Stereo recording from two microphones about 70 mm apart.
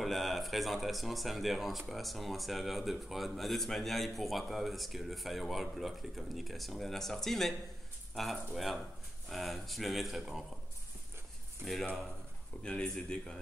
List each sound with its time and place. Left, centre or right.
0.0 s speech: centre
12.6 s speech: centre